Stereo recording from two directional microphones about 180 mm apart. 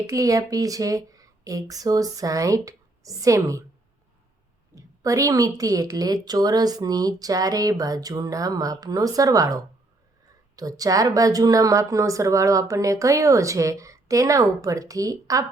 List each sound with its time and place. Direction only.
0.1 s a woman's voice: 20° right (ahead or behind)
4.7 s a woman's voice: 20° right (ahead or behind)